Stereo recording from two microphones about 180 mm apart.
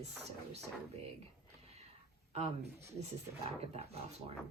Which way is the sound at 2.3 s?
35° right (ahead or behind).